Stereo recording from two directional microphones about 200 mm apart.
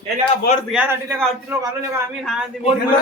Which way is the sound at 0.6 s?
5° right (ahead or behind).